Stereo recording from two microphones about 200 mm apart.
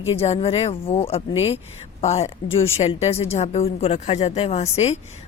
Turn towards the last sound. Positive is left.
turn(degrees=30)  # may be behind; listen again after turning